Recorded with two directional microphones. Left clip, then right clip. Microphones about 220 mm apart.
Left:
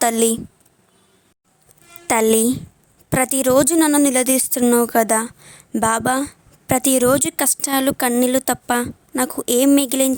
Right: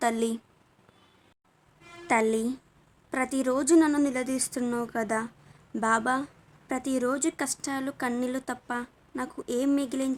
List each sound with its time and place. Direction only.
0.0 s speech: 45° left (ahead or behind)
2.0 s speech: 45° left (ahead or behind)